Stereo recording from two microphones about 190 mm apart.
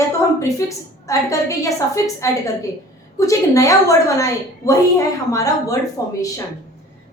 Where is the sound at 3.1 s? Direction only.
15° left (ahead or behind).